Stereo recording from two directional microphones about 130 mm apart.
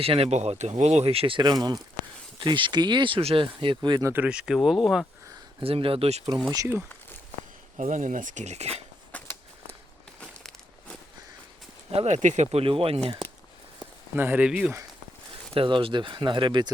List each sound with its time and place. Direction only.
0.0 s speech: 50° right (ahead or behind); by 4.1 s 30° right (ahead or behind)
4.1 s speech: 10° right (ahead or behind)
5.5 s speech: 45° right (ahead or behind)
7.8 s speech: 75° right (ahead or behind); by 8.8 s 55° right (ahead or behind)
9.1 s a sound: 15° left (ahead or behind)
10.2 s crumpling: 5° left (ahead or behind)
11.9 s speech: 55° right (ahead or behind)
14.2 s speech: 15° right (ahead or behind)
15.5 s speech: 40° right (ahead or behind)